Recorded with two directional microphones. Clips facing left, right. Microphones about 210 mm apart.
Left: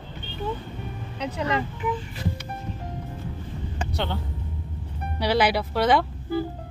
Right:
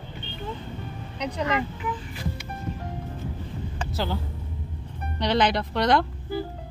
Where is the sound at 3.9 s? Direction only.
Centre (ahead or behind).